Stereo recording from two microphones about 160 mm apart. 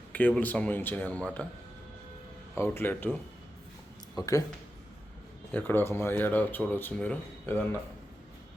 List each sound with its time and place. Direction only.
0.1 s speech: 10° left (ahead or behind)
2.6 s speech: 15° left (ahead or behind)
5.5 s speech: 10° left (ahead or behind)